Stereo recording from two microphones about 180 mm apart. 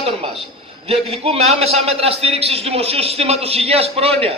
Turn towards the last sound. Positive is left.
turn(degrees=-30)  # may be behind; listen again after turning